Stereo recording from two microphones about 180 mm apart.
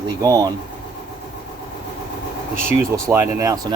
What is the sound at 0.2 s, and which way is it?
Speech, 20° right (ahead or behind).